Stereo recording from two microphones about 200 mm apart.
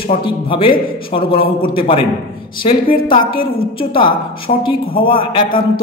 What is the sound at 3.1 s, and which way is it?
A man's voice, 25° left (ahead or behind).